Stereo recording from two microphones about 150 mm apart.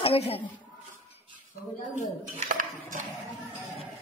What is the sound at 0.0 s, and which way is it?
Speech, 40° left (ahead or behind).